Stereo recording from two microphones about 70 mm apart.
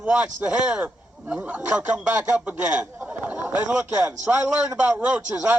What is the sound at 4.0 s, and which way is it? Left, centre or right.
Speech, centre.